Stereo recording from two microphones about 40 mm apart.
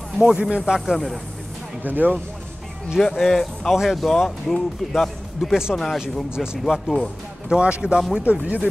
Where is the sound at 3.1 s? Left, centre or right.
Centre.